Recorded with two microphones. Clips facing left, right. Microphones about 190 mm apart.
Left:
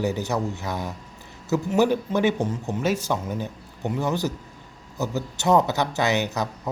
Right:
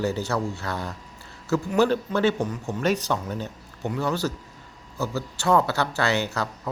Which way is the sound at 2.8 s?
10° left (ahead or behind).